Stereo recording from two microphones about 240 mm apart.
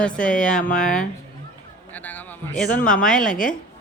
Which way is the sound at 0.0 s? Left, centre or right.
Centre.